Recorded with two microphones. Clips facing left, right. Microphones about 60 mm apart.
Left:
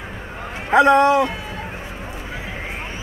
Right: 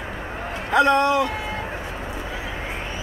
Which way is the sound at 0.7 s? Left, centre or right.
Left.